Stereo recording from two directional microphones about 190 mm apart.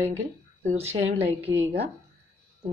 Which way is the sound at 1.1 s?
30° right (ahead or behind).